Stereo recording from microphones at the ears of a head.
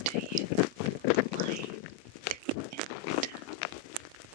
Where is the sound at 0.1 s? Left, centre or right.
Left.